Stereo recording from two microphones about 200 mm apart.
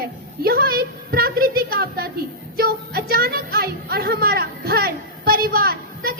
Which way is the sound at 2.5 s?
50° right (ahead or behind).